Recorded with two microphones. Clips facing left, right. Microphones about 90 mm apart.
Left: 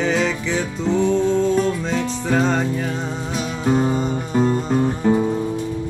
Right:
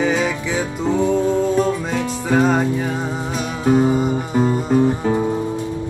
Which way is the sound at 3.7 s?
5° right (ahead or behind).